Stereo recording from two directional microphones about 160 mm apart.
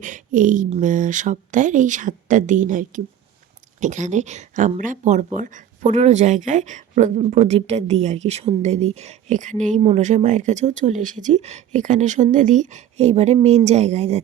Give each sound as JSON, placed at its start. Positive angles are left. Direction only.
{"t": 0.0, "sound": "speech", "side_deg": -55}